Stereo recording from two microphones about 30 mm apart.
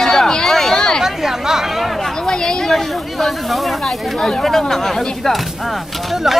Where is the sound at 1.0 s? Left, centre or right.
Centre.